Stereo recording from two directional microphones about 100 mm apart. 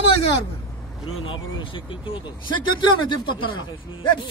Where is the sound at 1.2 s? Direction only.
60° left (ahead or behind).